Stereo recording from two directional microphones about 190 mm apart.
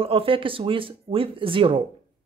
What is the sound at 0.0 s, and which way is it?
Speech, 30° right (ahead or behind).